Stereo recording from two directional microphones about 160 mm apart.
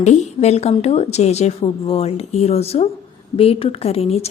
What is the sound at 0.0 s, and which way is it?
A woman's voice, 45° left (ahead or behind).